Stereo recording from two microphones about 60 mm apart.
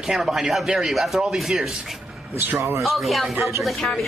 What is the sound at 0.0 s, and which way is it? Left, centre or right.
Speech, centre.